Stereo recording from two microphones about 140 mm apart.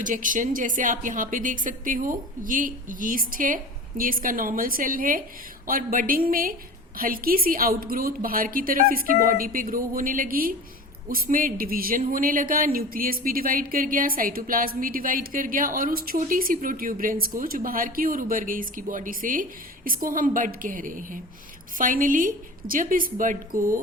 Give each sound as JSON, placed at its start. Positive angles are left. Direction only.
{"t": 0.0, "sound": "a woman's voice", "side_deg": -70}